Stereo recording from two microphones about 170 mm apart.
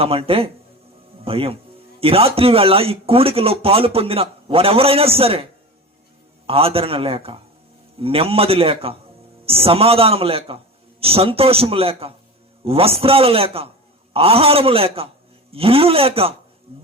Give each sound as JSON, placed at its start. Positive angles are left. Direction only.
{"t": 0.0, "sound": "speech", "side_deg": -35}
{"t": 6.5, "sound": "speech", "side_deg": -35}
{"t": 16.7, "sound": "a sound", "side_deg": -35}